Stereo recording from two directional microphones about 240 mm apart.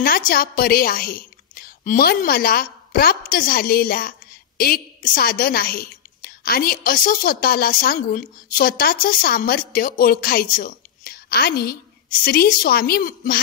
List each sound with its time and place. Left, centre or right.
0.0 s a woman's voice: left